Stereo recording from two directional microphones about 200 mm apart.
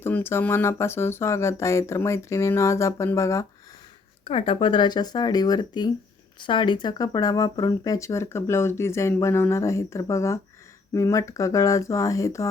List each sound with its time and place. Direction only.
0.0 s speech: 10° left (ahead or behind)
4.2 s speech: 30° left (ahead or behind)